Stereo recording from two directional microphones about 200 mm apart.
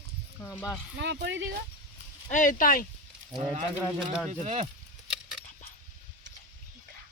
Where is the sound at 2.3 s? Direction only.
40° left (ahead or behind).